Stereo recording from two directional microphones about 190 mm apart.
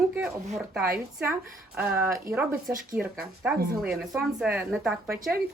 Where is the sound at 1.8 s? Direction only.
10° right (ahead or behind).